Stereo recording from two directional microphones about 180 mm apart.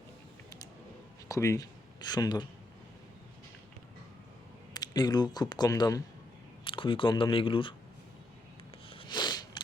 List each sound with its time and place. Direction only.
1.3 s speech: 20° left (ahead or behind)
4.7 s speech: 20° left (ahead or behind)
8.9 s a sound: 25° left (ahead or behind)